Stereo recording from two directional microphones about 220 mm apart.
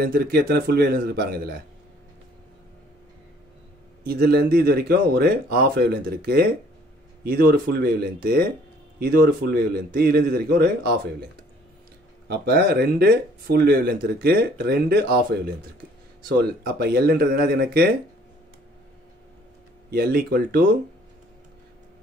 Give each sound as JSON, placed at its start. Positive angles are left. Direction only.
{"t": 0.0, "sound": "speech", "side_deg": -45}
{"t": 4.0, "sound": "speech", "side_deg": -45}
{"t": 12.3, "sound": "speech", "side_deg": -45}
{"t": 16.6, "sound": "speech", "side_deg": -45}
{"t": 19.9, "sound": "speech", "side_deg": -45}